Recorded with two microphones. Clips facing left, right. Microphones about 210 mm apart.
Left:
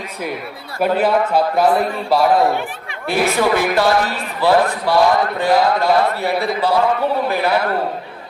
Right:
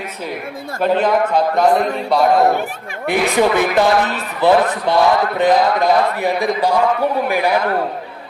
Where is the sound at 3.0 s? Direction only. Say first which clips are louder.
Right 1 dB; 20° right (ahead or behind).